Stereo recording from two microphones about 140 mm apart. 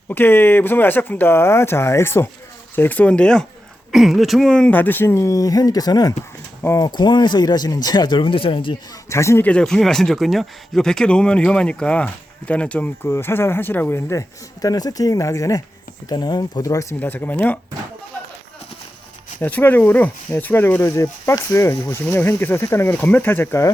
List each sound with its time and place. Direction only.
0.1 s speech: 15° left (ahead or behind); by 8.7 s 40° left (ahead or behind)
9.0 s speech: 20° left (ahead or behind)
17.0 s speech: 10° left (ahead or behind)
19.4 s speech: 15° left (ahead or behind)